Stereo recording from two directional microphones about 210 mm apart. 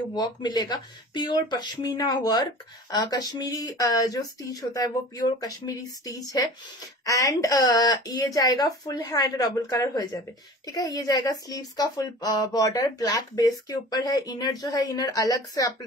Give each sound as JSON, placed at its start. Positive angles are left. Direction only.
{"t": 0.1, "sound": "speech", "side_deg": 20}